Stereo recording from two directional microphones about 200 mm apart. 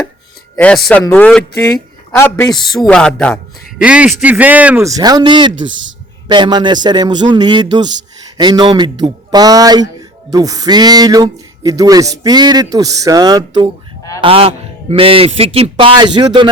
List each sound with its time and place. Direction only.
0.5 s speech: 5° left (ahead or behind); by 5.5 s 25° right (ahead or behind)
5.6 s speech: 70° right (ahead or behind)
6.2 s a man's voice: 20° right (ahead or behind)